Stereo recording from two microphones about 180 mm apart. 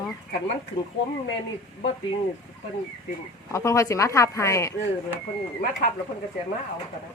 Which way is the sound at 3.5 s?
15° left (ahead or behind).